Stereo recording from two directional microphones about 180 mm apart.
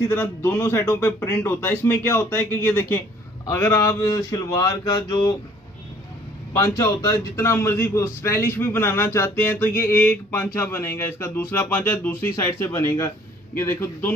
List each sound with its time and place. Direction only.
0.1 s a man's voice: 15° left (ahead or behind)
3.4 s a sound: 15° left (ahead or behind)
6.5 s a man's voice: 20° left (ahead or behind)